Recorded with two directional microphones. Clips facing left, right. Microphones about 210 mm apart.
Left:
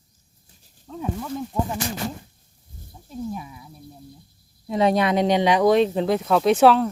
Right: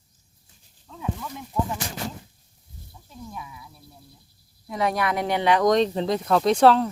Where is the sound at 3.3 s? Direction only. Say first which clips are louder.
Left 6 dB; 35° left (ahead or behind).